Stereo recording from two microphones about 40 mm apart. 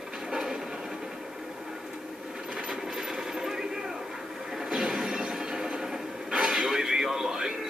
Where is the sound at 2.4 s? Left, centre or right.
Centre.